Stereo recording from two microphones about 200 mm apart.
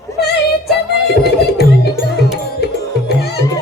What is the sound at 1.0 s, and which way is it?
Music, 55° left (ahead or behind).